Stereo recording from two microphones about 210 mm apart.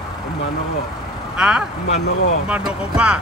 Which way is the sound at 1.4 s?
5° right (ahead or behind).